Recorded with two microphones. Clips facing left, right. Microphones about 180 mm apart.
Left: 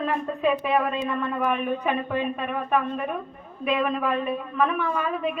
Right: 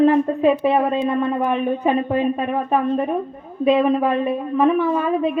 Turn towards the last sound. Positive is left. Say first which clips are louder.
# right 7 dB
turn(degrees=-30)  # may be behind; listen again after turning